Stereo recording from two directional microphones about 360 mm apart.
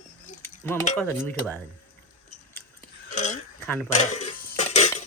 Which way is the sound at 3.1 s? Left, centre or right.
Centre.